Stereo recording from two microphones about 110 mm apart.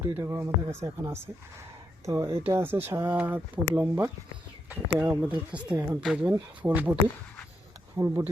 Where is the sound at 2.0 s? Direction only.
30° right (ahead or behind).